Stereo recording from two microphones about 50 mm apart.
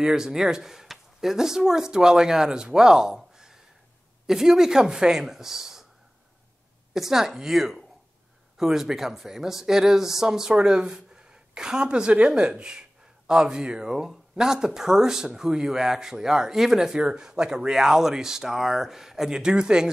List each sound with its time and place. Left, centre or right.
0.0 s speech: centre
6.9 s speech: centre